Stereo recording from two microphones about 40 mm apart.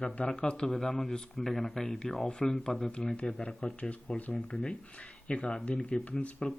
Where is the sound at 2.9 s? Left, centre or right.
Left.